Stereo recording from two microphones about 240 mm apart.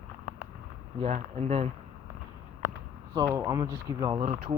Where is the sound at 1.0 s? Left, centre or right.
Right.